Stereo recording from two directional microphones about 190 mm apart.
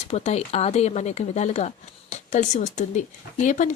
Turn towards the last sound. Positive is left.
turn(degrees=40)  # may be behind; listen again after turning